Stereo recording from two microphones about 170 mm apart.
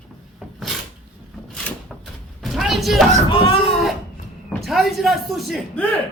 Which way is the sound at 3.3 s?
35° left (ahead or behind).